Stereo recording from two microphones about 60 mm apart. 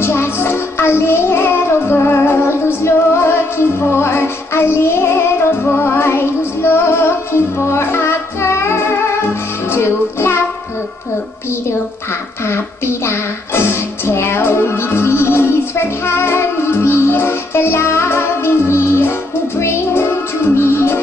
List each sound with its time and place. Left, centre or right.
0.0 s music: left
2.5 s music: left
12.4 s music: left